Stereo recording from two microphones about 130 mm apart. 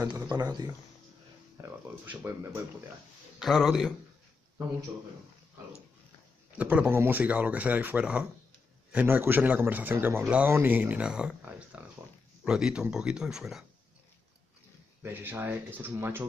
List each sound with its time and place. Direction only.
0.0 s speech: 35° right (ahead or behind)
1.6 s speech: 20° right (ahead or behind)
3.3 s speech: centre (ahead or behind)
6.5 s a man's voice: 10° right (ahead or behind)
15.0 s a man's voice: 15° right (ahead or behind)